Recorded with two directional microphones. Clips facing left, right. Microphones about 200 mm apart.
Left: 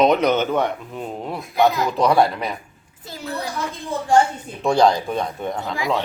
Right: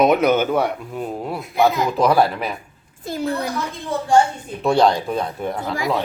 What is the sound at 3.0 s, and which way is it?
Speech, 50° right (ahead or behind).